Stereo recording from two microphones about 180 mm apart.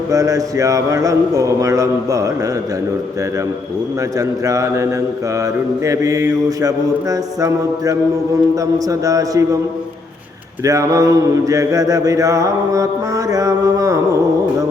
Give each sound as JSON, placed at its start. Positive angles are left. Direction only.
{"t": 0.1, "sound": "mantra", "side_deg": -20}
{"t": 4.2, "sound": "speech", "side_deg": -20}
{"t": 5.8, "sound": "mantra", "side_deg": -20}
{"t": 10.6, "sound": "mantra", "side_deg": -20}